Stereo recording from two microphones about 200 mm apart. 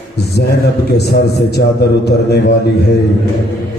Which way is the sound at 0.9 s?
55° left (ahead or behind).